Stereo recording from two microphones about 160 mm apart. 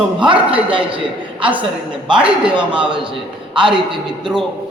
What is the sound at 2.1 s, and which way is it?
Speech, 5° right (ahead or behind).